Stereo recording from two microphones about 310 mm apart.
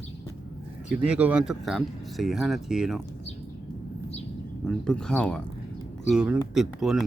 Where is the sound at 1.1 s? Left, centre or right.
Centre.